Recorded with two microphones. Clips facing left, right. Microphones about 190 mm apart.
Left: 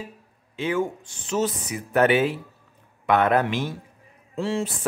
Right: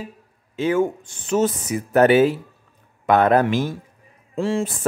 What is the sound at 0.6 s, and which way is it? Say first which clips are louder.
Speech: right 5 dB; 45° right (ahead or behind).